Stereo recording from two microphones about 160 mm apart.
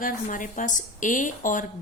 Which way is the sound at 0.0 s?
55° left (ahead or behind).